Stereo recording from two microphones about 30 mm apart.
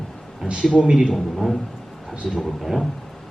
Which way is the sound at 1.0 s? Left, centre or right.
Centre.